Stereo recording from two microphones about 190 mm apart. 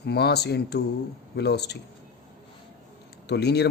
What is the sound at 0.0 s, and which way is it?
Speech, 60° left (ahead or behind).